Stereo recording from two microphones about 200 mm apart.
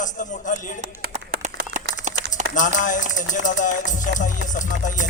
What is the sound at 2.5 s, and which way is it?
A man's voice, 40° left (ahead or behind).